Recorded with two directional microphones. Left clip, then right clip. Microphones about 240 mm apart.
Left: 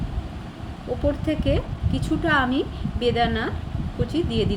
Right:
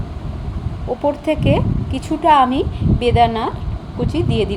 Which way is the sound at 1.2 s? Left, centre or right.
Centre.